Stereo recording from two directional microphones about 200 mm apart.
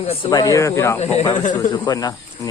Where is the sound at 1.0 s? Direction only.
35° left (ahead or behind).